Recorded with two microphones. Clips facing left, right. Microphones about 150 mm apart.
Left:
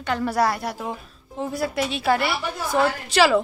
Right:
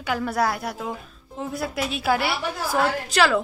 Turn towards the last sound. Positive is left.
turn(degrees=0)  # may be behind; listen again after turning